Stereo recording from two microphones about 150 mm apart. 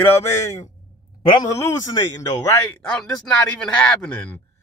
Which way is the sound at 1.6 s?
25° left (ahead or behind).